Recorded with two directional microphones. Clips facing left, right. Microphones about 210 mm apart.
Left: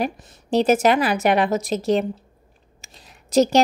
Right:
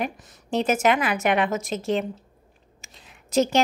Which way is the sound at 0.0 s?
30° left (ahead or behind).